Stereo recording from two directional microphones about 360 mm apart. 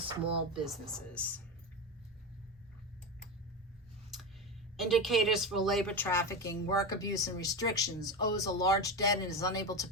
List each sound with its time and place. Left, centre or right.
0.5 s speech: centre
4.8 s a woman's voice: centre